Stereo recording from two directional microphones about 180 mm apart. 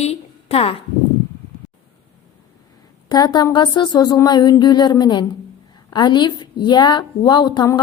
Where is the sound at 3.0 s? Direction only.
20° left (ahead or behind).